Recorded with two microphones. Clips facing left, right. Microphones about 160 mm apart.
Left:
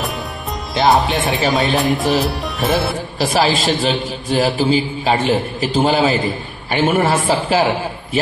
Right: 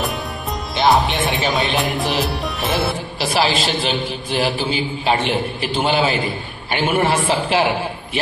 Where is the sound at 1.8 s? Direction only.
Centre (ahead or behind).